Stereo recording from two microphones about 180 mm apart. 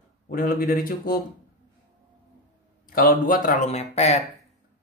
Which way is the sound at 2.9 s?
50° left (ahead or behind).